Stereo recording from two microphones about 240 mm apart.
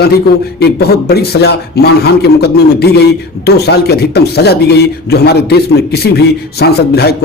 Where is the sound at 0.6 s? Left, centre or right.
Left.